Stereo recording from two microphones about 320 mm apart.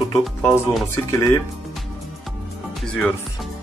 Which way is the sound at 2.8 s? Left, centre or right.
Centre.